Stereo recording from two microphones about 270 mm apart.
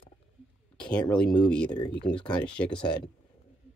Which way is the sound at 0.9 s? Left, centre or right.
Centre.